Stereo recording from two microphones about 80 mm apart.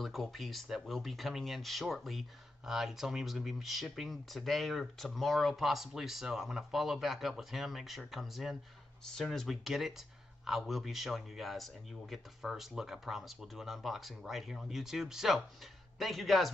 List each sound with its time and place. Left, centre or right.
0.0 s speech: centre